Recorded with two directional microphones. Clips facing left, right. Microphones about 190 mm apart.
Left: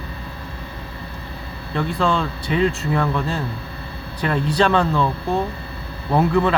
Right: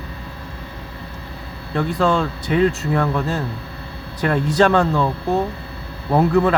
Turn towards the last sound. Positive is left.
turn(degrees=-45)  # may be behind; listen again after turning